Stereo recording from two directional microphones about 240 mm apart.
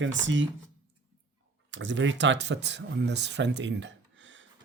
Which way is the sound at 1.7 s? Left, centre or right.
Right.